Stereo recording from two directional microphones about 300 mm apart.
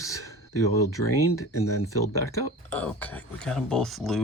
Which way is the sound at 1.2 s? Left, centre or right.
Left.